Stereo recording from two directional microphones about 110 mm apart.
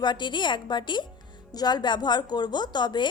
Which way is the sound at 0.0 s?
45° left (ahead or behind).